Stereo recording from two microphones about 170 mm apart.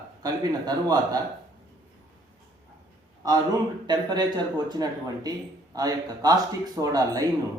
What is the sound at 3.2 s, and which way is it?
Speech, 20° right (ahead or behind).